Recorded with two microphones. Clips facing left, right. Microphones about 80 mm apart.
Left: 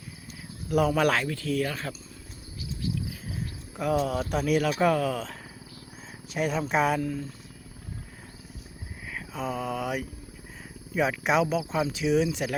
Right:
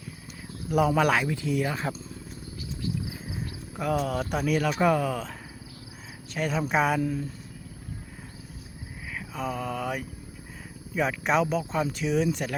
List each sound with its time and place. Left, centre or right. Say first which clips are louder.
0.9 s speech: right 1 dB; centre
1.2 s speech: right 1 dB; centre
3.8 s speech: left 1 dB; centre
7.0 s speech: right 2 dB; centre
9.1 s mantra: even; centre
10.9 s speech: even; centre